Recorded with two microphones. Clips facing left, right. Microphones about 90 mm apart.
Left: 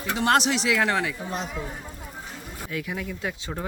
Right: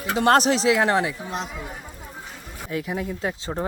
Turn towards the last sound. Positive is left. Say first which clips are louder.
# right 4 dB
turn(degrees=-25)  # may be behind; listen again after turning